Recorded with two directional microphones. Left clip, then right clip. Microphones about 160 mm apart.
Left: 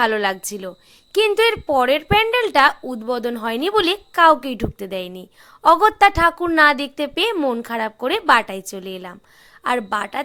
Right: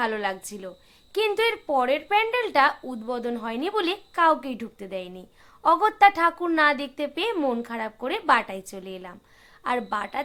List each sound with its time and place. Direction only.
0.0 s speech: 40° left (ahead or behind)
7.3 s speech: 25° left (ahead or behind)